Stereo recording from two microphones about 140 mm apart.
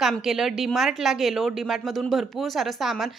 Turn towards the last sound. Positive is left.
turn(degrees=0)  # may be behind; listen again after turning